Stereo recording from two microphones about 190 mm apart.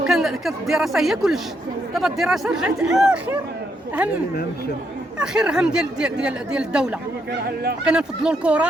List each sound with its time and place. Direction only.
0.1 s speech: centre (ahead or behind)
5.2 s speech: 5° right (ahead or behind)
7.4 s speech: 55° right (ahead or behind)
7.9 s speech: 5° right (ahead or behind)